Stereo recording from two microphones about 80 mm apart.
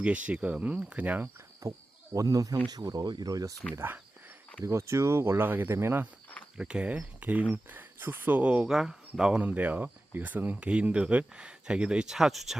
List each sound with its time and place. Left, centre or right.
0.0 s speech: centre
1.6 s speech: right
3.8 s speech: right
4.6 s speech: right
6.6 s speech: centre
9.4 s speech: centre